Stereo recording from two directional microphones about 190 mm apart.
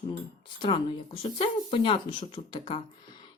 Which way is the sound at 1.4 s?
30° left (ahead or behind).